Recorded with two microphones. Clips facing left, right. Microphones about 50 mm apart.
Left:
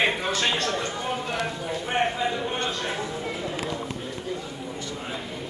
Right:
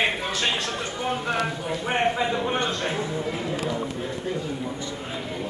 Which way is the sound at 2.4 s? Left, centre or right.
Right.